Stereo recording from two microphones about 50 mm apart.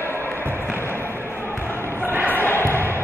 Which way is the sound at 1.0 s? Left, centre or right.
Right.